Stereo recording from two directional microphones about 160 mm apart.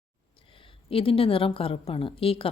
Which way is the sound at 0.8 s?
35° left (ahead or behind).